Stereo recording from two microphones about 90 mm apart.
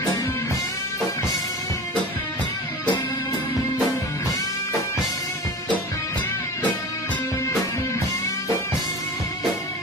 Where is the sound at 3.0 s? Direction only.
25° left (ahead or behind).